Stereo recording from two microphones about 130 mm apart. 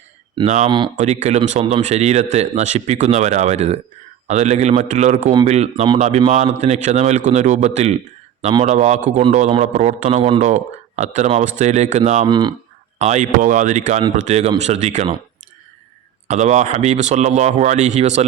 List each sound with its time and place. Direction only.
0.4 s a man's voice: 65° right (ahead or behind)
12.3 s speech: 35° right (ahead or behind)
13.0 s a man's voice: 65° right (ahead or behind)
16.3 s a man's voice: 60° right (ahead or behind)